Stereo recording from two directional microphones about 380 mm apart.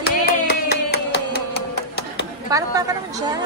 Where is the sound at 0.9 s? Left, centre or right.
Left.